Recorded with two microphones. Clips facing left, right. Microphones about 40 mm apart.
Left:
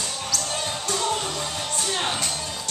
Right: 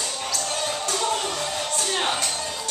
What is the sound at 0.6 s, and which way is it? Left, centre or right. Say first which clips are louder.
Music: right 2 dB; centre.